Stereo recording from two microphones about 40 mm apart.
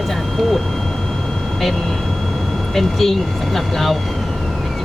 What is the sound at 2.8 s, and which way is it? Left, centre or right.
Speech, centre.